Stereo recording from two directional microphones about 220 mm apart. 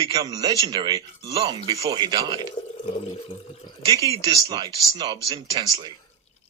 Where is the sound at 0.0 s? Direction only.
15° right (ahead or behind).